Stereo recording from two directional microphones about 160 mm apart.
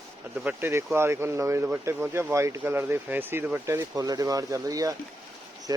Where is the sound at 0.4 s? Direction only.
15° right (ahead or behind).